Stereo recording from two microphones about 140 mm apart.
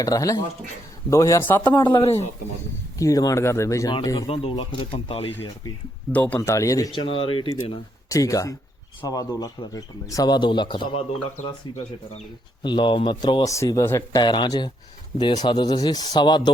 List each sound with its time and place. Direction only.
0.0 s a man's voice: 25° left (ahead or behind)
1.8 s speech: 35° left (ahead or behind)
2.0 s speech: 50° left (ahead or behind)
3.0 s speech: 25° left (ahead or behind)
4.3 s speech: 40° left (ahead or behind)
5.3 s speech: 15° left (ahead or behind)
7.0 s speech: 40° left (ahead or behind)
8.1 s speech: 25° left (ahead or behind)
11.3 s speech: 55° left (ahead or behind)
12.6 s speech: 35° left (ahead or behind)
14.2 s speech: 30° left (ahead or behind)